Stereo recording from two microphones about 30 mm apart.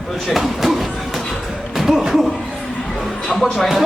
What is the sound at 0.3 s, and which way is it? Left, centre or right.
Speech, centre.